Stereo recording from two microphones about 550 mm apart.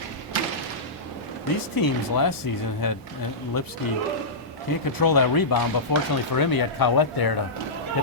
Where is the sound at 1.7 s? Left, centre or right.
Left.